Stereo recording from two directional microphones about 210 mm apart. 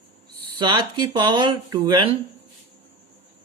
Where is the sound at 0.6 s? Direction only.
20° right (ahead or behind).